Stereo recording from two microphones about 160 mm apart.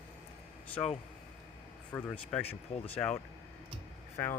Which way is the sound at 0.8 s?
10° left (ahead or behind).